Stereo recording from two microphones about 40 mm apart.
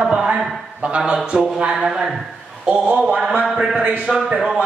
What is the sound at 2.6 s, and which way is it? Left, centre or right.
Speech, right.